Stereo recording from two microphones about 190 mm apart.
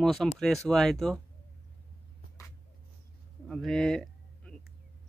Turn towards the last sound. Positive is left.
turn(degrees=5)  # may be behind; listen again after turning